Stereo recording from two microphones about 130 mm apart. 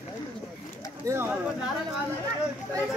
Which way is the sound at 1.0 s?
20° right (ahead or behind).